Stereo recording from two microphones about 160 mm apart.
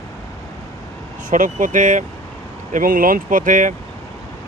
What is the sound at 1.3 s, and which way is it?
Speech, 55° right (ahead or behind).